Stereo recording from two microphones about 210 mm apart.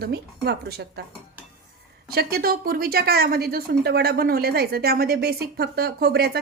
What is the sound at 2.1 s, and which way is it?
A woman's voice, 45° right (ahead or behind).